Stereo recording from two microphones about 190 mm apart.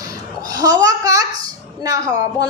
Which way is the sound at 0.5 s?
20° right (ahead or behind).